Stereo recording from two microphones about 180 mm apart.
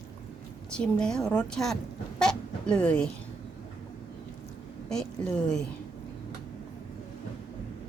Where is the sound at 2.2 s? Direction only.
5° left (ahead or behind).